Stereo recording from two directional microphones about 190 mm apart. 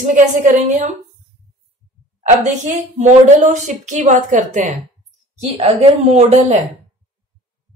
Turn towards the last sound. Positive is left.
turn(degrees=-35)  # may be behind; listen again after turning